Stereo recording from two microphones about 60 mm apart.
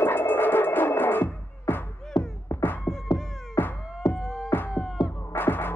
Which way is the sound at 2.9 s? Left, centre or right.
Left.